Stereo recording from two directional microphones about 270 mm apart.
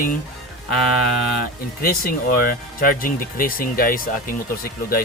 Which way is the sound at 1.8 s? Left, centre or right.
Left.